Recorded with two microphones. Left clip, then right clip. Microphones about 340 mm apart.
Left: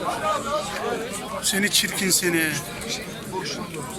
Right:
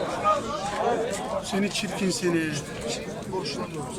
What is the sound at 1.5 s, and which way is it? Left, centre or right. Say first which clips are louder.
Speech: left 6 dB; centre.